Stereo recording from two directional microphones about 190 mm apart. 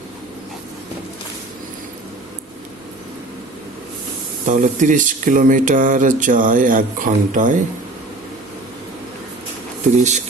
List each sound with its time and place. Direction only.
4.4 s speech: 40° right (ahead or behind)
9.9 s speech: 35° right (ahead or behind)